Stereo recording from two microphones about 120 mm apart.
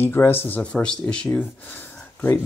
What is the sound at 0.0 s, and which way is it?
Speech, 20° left (ahead or behind).